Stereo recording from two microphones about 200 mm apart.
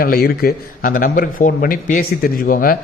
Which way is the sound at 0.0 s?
45° left (ahead or behind).